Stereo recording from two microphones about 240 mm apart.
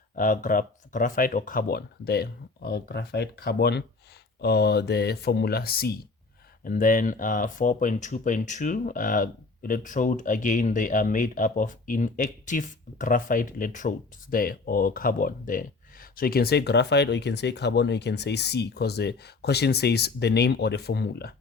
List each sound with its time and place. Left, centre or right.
0.2 s speech: left